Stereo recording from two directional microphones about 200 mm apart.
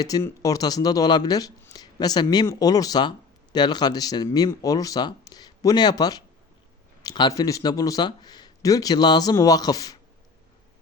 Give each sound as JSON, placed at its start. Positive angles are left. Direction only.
{"t": 0.0, "sound": "speech", "side_deg": 15}